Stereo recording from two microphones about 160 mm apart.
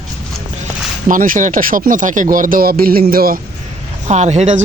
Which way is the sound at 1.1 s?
55° right (ahead or behind).